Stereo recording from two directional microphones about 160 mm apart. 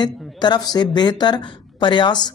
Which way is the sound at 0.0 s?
25° left (ahead or behind).